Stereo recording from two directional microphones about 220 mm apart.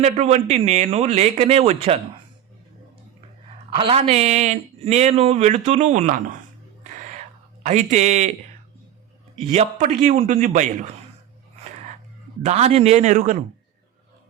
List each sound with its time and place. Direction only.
0.0 s a man's voice: 30° right (ahead or behind)
3.7 s speech: 25° right (ahead or behind)
6.9 s music: 35° right (ahead or behind)
7.6 s speech: 35° right (ahead or behind)
11.6 s a sound: 30° right (ahead or behind)
12.4 s speech: 30° right (ahead or behind)